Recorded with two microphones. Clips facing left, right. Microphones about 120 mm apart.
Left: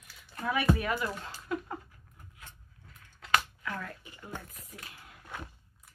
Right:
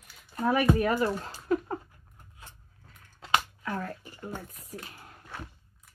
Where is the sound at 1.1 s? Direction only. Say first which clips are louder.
Right 7 dB; 40° right (ahead or behind).